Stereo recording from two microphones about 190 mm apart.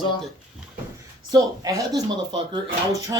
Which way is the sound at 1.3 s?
20° right (ahead or behind).